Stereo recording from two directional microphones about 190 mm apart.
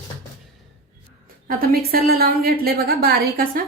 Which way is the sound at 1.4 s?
50° right (ahead or behind).